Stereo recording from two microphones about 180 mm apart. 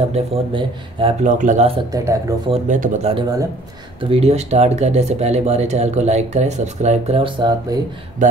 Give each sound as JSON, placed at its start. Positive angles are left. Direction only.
{"t": 0.1, "sound": "speech", "side_deg": -30}
{"t": 1.2, "sound": "speech", "side_deg": -45}
{"t": 1.9, "sound": "speech", "side_deg": -20}
{"t": 2.5, "sound": "speech", "side_deg": -45}